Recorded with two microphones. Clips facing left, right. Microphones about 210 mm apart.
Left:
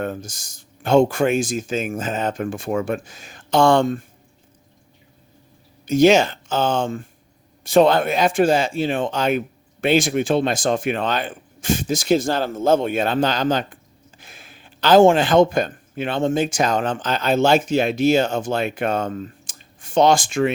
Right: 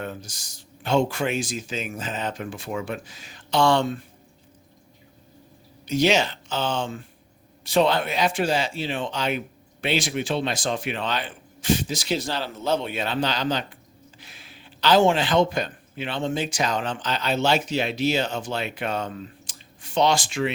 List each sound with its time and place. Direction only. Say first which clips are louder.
0.0 s speech: left 7 dB; 50° left (ahead or behind)
5.8 s a man's voice: left 7 dB; 50° left (ahead or behind)